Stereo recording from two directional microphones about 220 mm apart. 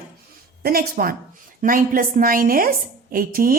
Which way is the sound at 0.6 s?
45° right (ahead or behind).